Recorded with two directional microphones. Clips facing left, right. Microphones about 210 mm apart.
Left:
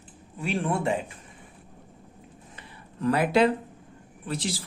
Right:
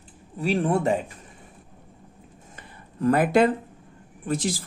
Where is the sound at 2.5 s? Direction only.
50° right (ahead or behind).